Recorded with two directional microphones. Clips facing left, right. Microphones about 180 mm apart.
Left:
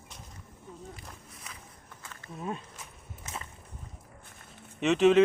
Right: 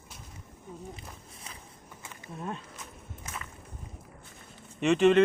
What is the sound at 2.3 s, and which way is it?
Walk, centre (ahead or behind).